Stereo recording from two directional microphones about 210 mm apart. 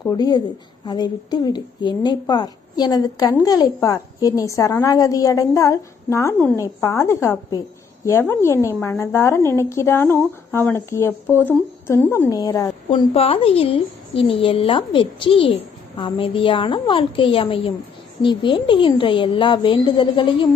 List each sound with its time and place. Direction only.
0.0 s a woman's voice: 20° left (ahead or behind)
13.1 s a woman's voice: 25° left (ahead or behind)